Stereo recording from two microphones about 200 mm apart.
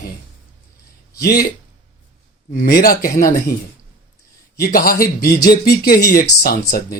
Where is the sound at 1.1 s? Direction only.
50° left (ahead or behind).